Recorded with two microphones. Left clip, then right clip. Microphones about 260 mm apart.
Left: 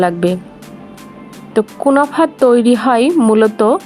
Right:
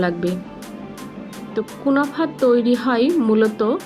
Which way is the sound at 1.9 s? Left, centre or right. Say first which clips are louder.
Left 7 dB; left.